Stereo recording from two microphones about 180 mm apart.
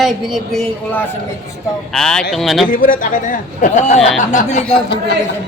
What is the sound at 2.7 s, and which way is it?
A man's voice, 50° left (ahead or behind).